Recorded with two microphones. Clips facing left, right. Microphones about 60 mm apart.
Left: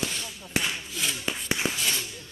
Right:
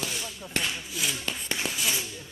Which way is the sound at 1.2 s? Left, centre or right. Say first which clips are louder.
Left 3 dB; centre.